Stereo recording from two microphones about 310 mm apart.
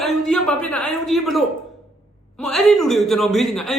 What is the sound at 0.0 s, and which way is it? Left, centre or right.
Speech, centre.